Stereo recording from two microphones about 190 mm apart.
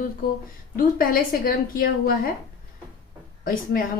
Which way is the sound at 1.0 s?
50° left (ahead or behind).